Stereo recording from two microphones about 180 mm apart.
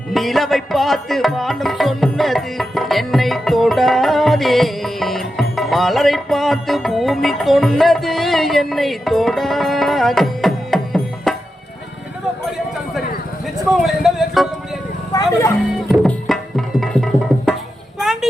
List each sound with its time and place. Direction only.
0.1 s music: centre (ahead or behind)
13.8 s music: centre (ahead or behind)
15.1 s speech: 15° left (ahead or behind)
15.7 s tabla: centre (ahead or behind)
18.0 s a sound: centre (ahead or behind)